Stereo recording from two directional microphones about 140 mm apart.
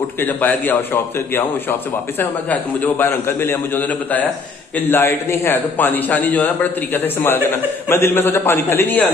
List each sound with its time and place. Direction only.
0.2 s a man's voice: 15° left (ahead or behind)
2.8 s a man's voice: 15° left (ahead or behind)